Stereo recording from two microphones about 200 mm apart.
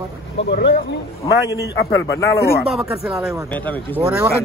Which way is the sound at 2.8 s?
15° right (ahead or behind).